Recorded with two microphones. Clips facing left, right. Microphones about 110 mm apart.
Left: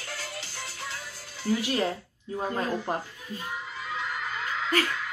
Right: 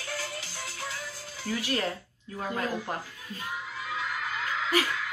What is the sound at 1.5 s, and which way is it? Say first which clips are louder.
Speech: left 6 dB; 25° left (ahead or behind).